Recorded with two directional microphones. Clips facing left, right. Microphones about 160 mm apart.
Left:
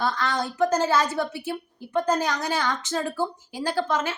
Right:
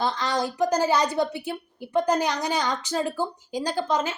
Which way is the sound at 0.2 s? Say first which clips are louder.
Even; 20° right (ahead or behind).